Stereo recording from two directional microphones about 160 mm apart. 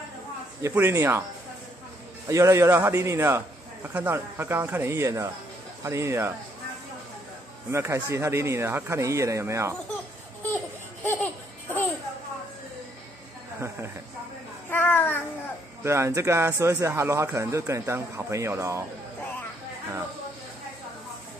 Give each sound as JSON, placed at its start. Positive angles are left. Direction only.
{"t": 0.6, "sound": "a man's voice", "side_deg": -15}
{"t": 2.2, "sound": "a man's voice", "side_deg": -20}
{"t": 7.7, "sound": "a man's voice", "side_deg": -15}
{"t": 11.1, "sound": "laughter", "side_deg": 10}
{"t": 14.7, "sound": "child singing", "side_deg": 10}
{"t": 15.8, "sound": "a man's voice", "side_deg": -15}